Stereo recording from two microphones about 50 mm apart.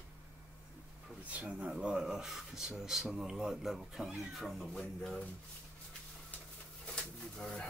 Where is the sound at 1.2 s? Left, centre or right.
Right.